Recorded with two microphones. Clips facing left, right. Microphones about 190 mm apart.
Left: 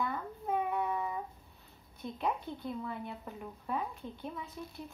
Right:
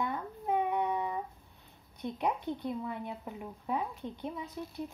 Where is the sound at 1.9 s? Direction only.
15° right (ahead or behind).